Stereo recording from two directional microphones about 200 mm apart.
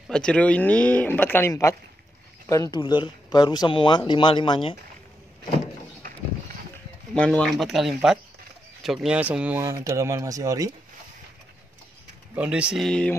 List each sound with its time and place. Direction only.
0.1 s speech: 5° left (ahead or behind); by 4.7 s 25° left (ahead or behind)
6.0 s run: 45° right (ahead or behind)
7.2 s speech: 5° left (ahead or behind); by 10.7 s 15° right (ahead or behind)
12.4 s speech: 5° right (ahead or behind)